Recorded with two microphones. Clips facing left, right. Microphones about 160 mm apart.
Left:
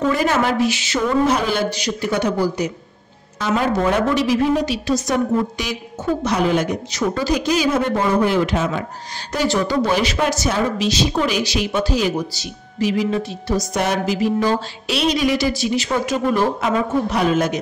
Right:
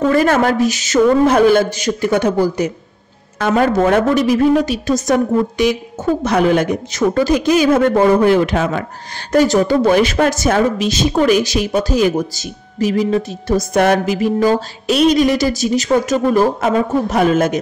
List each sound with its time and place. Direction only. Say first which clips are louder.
0.1 s speech: right 5 dB; 50° right (ahead or behind)
6.2 s speech: right 5 dB; 55° right (ahead or behind)